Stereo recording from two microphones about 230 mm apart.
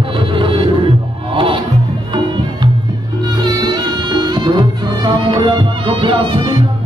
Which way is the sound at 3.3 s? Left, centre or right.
Centre.